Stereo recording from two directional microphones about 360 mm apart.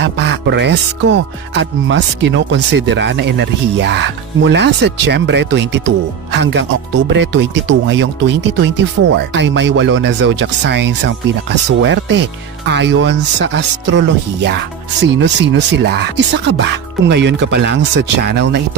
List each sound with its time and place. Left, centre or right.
0.0 s speech: right